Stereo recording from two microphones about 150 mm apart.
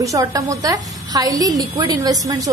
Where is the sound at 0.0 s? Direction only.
20° right (ahead or behind).